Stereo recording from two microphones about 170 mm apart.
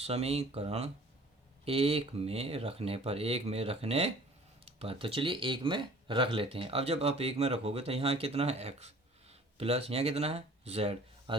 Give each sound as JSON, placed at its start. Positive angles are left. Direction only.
{"t": 0.0, "sound": "speech", "side_deg": -35}